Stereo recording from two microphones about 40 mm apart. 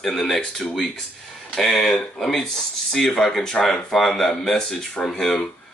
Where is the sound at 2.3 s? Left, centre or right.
Centre.